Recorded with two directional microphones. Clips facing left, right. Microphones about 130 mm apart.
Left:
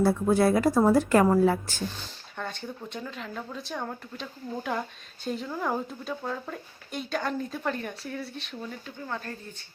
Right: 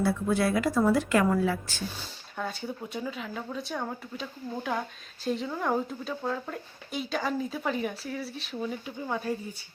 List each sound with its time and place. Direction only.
0.0 s a woman's voice: 40° left (ahead or behind)
2.0 s speech: 5° right (ahead or behind)